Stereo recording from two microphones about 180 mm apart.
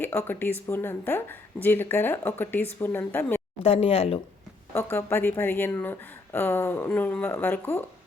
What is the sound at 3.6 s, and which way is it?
Speech, 35° left (ahead or behind).